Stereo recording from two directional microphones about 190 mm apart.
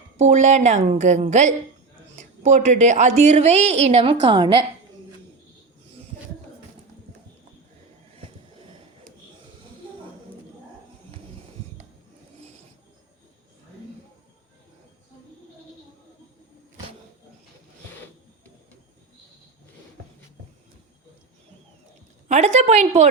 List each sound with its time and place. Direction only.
0.2 s a woman's voice: 35° right (ahead or behind)
22.3 s a woman's voice: 35° right (ahead or behind)